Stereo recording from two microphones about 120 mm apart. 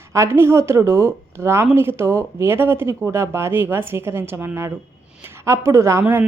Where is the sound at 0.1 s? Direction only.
20° right (ahead or behind).